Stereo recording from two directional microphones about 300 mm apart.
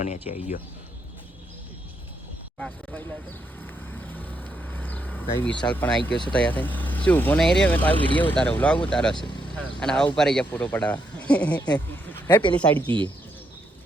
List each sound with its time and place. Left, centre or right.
0.0 s speech: left
2.6 s speech: centre
3.8 s vehicle: centre
5.2 s speech: centre
12.5 s speech: centre